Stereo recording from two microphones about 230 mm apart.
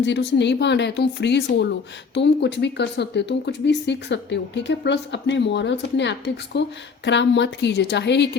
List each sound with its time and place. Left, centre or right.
0.0 s speech: left